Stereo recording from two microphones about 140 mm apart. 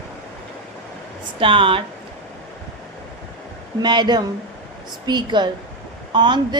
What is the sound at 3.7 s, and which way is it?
A woman's voice, 30° right (ahead or behind).